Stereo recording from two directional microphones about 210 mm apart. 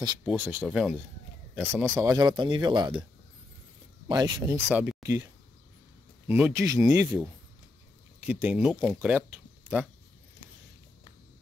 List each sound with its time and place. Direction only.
0.2 s speech: 5° right (ahead or behind)
1.8 s speech: 15° right (ahead or behind)
4.1 s speech: 15° right (ahead or behind)
4.6 s speech: 5° right (ahead or behind)
6.2 s speech: 10° right (ahead or behind)
8.3 s speech: 5° right (ahead or behind)